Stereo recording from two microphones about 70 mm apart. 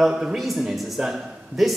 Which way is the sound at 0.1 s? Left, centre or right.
Centre.